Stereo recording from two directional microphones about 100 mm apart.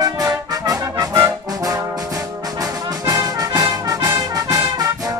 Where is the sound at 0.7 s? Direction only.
35° right (ahead or behind).